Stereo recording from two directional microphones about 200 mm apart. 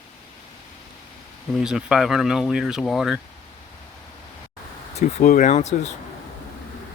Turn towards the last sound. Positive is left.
turn(degrees=35)  # may be behind; listen again after turning